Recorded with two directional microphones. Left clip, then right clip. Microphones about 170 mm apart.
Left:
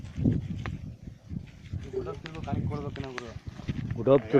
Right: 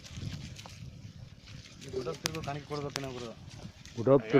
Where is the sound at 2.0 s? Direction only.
40° right (ahead or behind).